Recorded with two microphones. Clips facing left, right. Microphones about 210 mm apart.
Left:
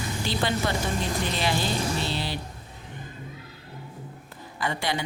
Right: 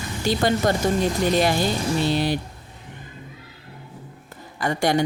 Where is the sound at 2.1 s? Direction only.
50° right (ahead or behind).